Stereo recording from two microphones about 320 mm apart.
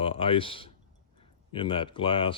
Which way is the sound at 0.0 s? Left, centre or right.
Centre.